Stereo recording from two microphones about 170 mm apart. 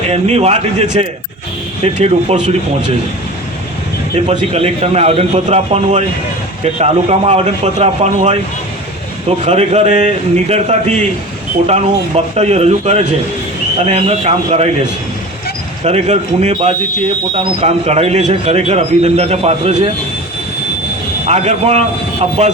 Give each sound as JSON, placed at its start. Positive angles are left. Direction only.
{"t": 0.1, "sound": "a man's voice", "side_deg": -35}
{"t": 4.1, "sound": "a man's voice", "side_deg": -35}
{"t": 9.4, "sound": "a man's voice", "side_deg": -40}
{"t": 15.8, "sound": "a man's voice", "side_deg": -40}
{"t": 21.2, "sound": "a man's voice", "side_deg": -40}